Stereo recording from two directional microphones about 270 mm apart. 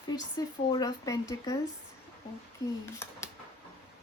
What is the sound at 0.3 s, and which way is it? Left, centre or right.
Speech, centre.